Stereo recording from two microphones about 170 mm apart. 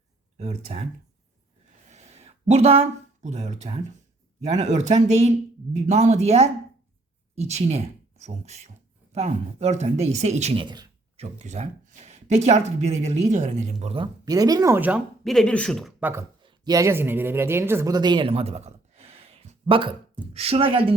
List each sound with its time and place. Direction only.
0.3 s speech: 40° right (ahead or behind)
1.9 s a sound: 40° right (ahead or behind)
4.4 s speech: 45° right (ahead or behind)
10.6 s speech: 25° right (ahead or behind)
11.2 s speech: 40° right (ahead or behind); by 15.0 s 10° right (ahead or behind)
15.2 s speech: centre (ahead or behind)
16.0 s speech: 10° right (ahead or behind)
16.4 s speech: 25° right (ahead or behind)